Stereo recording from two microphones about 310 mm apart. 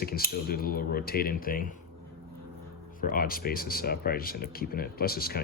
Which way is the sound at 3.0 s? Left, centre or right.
Left.